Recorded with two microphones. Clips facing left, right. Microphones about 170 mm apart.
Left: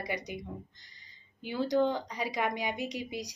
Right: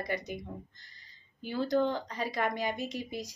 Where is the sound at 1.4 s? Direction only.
15° left (ahead or behind).